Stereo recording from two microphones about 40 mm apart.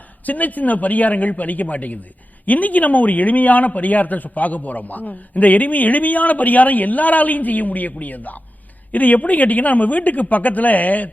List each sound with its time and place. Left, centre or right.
0.3 s speech: left